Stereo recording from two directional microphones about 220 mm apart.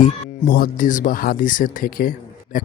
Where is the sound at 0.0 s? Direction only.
40° left (ahead or behind).